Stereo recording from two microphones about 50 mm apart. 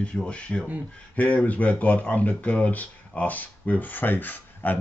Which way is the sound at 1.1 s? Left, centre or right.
Left.